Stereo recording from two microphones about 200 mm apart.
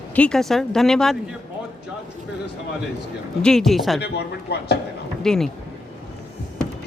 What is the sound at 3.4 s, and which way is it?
Speech, 5° left (ahead or behind).